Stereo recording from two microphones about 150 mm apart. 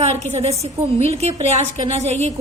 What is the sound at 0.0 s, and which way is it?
A woman's voice, 50° right (ahead or behind).